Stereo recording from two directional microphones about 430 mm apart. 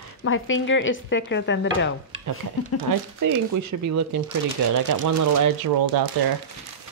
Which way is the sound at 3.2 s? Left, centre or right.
Right.